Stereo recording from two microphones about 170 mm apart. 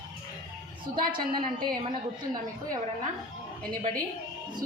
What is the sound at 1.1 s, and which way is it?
Speech, 55° right (ahead or behind).